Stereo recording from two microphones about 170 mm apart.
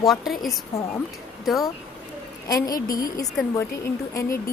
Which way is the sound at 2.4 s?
20° left (ahead or behind).